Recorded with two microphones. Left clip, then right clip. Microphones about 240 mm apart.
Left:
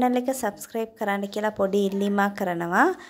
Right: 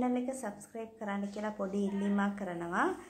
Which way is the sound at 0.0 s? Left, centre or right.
Left.